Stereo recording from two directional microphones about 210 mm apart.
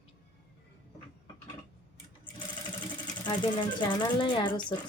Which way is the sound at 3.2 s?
20° left (ahead or behind).